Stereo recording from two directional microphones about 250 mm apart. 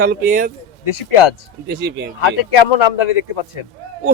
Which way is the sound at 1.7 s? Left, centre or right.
Right.